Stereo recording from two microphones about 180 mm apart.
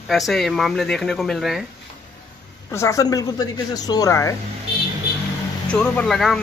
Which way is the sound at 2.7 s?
15° left (ahead or behind).